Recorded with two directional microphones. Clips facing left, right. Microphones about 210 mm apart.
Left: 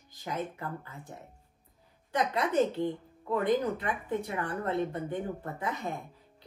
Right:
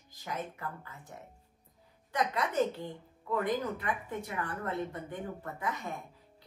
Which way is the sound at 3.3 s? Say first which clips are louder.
Left 4 dB; 25° left (ahead or behind).